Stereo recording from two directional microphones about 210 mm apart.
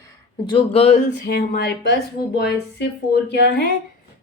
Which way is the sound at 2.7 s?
55° left (ahead or behind).